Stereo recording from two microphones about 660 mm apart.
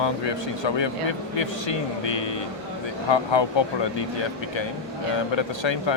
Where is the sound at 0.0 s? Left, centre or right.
Left.